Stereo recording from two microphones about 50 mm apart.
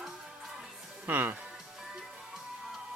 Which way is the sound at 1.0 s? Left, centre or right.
Right.